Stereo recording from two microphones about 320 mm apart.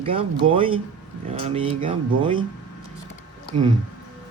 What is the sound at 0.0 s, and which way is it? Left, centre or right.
Speech, centre.